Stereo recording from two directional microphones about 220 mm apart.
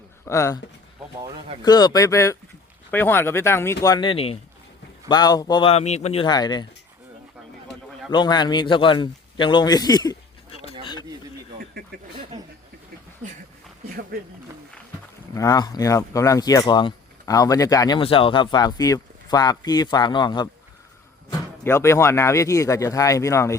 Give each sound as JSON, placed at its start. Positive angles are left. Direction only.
{"t": 0.3, "sound": "speech", "side_deg": 15}
{"t": 1.6, "sound": "speech", "side_deg": 20}
{"t": 8.1, "sound": "a man's voice", "side_deg": 20}
{"t": 13.8, "sound": "a sound", "side_deg": -40}
{"t": 15.4, "sound": "speech", "side_deg": 15}